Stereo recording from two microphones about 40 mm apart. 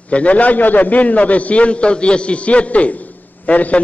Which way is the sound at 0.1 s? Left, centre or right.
Left.